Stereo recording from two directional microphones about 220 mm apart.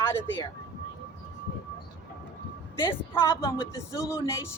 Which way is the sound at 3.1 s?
10° left (ahead or behind).